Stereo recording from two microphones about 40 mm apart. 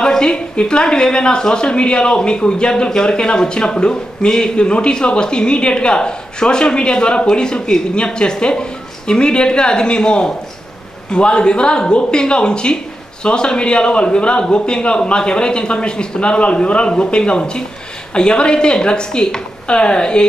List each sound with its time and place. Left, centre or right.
0.0 s a woman's voice: centre